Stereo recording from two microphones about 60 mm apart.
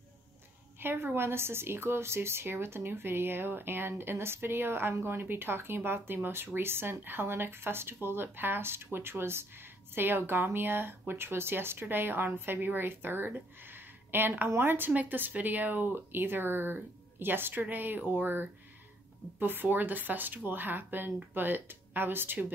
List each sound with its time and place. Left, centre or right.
0.7 s a woman's voice: right